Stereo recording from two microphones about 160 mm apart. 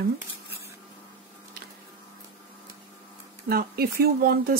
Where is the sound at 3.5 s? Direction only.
70° right (ahead or behind).